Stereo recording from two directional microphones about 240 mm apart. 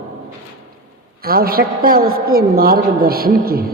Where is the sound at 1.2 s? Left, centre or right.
Right.